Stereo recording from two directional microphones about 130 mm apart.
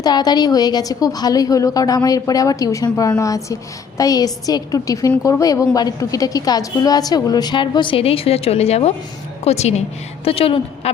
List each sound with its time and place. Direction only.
0.0 s a woman's voice: 30° left (ahead or behind); by 10.9 s 45° left (ahead or behind)